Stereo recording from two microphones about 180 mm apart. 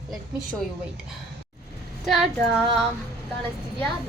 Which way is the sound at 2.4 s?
Centre (ahead or behind).